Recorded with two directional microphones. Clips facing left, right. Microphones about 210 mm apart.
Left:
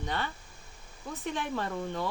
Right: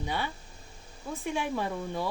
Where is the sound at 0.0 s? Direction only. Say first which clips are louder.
Right 1 dB; 10° right (ahead or behind).